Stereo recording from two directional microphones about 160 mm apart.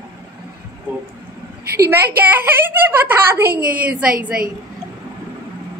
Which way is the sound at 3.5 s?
65° right (ahead or behind).